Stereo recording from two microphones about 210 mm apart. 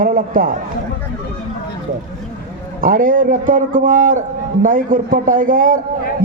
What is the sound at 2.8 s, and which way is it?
A man's voice, 40° right (ahead or behind).